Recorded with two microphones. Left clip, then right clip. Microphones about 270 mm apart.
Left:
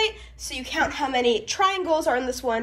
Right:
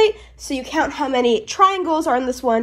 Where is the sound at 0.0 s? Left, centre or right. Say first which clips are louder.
Right 9 dB; centre.